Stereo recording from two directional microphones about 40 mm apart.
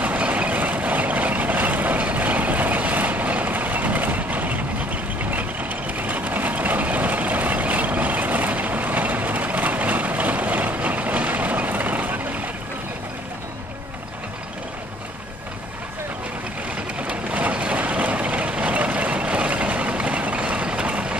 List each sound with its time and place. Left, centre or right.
0.2 s vehicle: right
17.0 s vehicle: right